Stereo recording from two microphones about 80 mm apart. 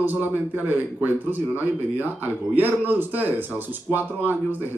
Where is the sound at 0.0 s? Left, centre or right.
Right.